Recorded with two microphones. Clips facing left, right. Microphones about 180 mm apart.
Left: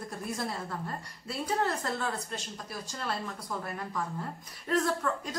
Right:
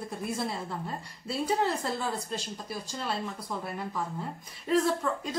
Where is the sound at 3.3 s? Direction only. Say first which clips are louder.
Right 1 dB; 5° right (ahead or behind).